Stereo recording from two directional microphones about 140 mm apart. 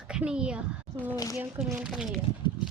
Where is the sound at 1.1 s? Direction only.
25° left (ahead or behind).